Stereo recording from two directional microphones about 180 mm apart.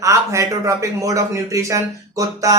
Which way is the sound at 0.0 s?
15° right (ahead or behind).